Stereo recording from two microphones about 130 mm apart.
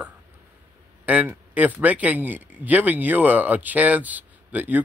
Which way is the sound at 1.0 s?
10° right (ahead or behind).